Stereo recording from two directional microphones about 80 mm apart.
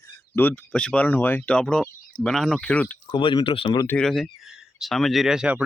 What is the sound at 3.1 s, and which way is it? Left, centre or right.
Speech, left.